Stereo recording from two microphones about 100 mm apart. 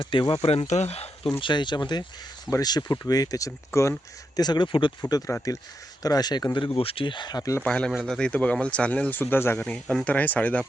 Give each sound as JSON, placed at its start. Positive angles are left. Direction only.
{"t": 0.0, "sound": "speech", "side_deg": 60}
{"t": 1.4, "sound": "speech", "side_deg": 50}
{"t": 4.4, "sound": "speech", "side_deg": 45}
{"t": 5.0, "sound": "speech", "side_deg": 40}
{"t": 6.7, "sound": "speech", "side_deg": 65}
{"t": 7.6, "sound": "speech", "side_deg": 10}